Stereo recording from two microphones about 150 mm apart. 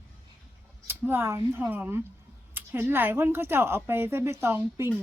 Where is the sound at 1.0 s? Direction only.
15° right (ahead or behind).